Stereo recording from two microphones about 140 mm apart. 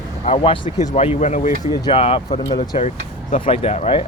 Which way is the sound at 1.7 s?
40° left (ahead or behind).